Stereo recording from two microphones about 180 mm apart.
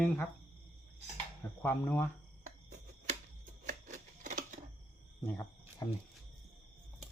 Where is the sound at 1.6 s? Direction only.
10° left (ahead or behind).